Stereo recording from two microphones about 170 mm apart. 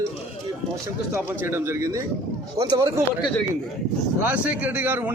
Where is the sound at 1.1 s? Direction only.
15° right (ahead or behind).